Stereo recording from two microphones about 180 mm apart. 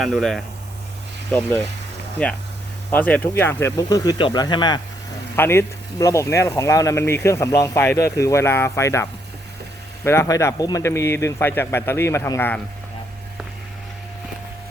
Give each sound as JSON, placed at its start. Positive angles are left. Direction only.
{"t": 0.0, "sound": "speech", "side_deg": 0}